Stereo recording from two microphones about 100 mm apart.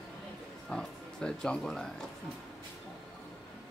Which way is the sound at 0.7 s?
5° left (ahead or behind).